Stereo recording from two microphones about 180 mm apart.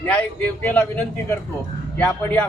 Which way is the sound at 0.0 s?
5° left (ahead or behind).